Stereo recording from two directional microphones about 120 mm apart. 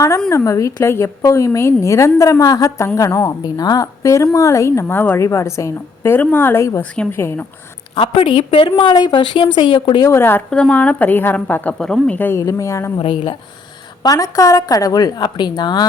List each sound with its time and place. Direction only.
0.3 s a woman's voice: 25° left (ahead or behind)
7.9 s a woman's voice: 50° left (ahead or behind)
10.1 s a woman's voice: 20° left (ahead or behind)
10.5 s a woman's voice: 10° left (ahead or behind); by 12.9 s 25° left (ahead or behind)
14.0 s a woman's voice: 30° left (ahead or behind)